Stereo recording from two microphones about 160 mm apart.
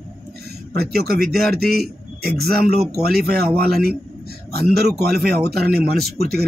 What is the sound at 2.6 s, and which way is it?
Speech, 75° right (ahead or behind).